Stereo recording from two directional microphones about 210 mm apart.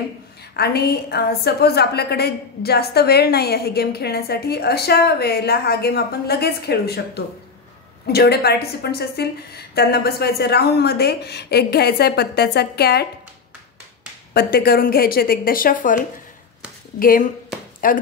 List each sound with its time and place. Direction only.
0.6 s a woman's voice: 50° left (ahead or behind)
14.3 s a woman's voice: 45° left (ahead or behind)
17.0 s a woman's voice: 40° left (ahead or behind)